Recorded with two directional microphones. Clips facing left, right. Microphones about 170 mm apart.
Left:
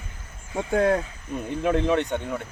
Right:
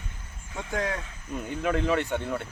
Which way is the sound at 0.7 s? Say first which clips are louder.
Left 9 dB; 30° left (ahead or behind).